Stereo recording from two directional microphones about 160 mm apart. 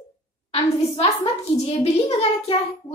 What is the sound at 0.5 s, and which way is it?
A child's voice, 40° left (ahead or behind).